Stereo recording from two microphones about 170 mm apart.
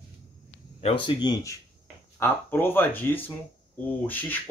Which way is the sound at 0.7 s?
35° left (ahead or behind).